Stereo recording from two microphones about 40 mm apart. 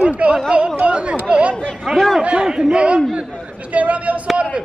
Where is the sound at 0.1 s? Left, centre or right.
Right.